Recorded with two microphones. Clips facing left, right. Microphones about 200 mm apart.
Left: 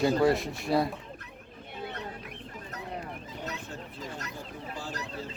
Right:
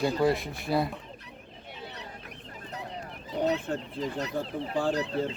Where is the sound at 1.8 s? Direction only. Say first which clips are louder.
Left 5 dB; 50° left (ahead or behind).